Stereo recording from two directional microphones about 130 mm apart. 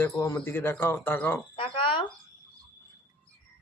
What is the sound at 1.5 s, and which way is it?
Speech, 45° left (ahead or behind).